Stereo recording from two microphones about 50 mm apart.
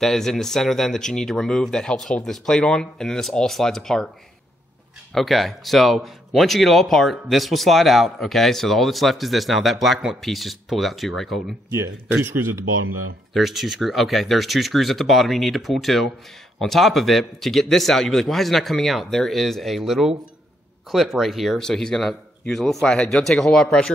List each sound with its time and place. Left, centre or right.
0.0 s speech: centre
5.1 s speech: centre
12.2 s speech: right
13.3 s speech: centre
21.5 s speech: centre